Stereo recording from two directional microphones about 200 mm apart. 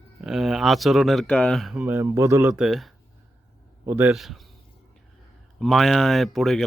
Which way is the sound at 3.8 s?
10° right (ahead or behind).